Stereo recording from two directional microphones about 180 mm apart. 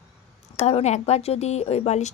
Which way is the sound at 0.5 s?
40° left (ahead or behind).